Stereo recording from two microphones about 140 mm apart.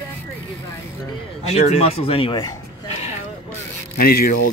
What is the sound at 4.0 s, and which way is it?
Speech, 90° left.